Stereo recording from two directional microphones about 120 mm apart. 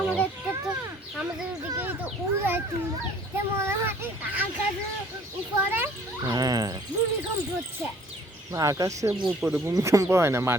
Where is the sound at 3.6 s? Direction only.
20° right (ahead or behind).